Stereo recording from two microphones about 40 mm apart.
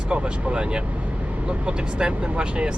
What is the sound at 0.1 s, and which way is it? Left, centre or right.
Speech, right.